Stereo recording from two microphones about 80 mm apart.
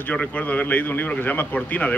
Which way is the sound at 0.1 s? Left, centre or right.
Centre.